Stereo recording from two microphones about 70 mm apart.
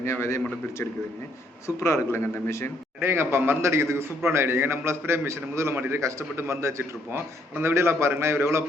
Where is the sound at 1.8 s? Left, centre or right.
Left.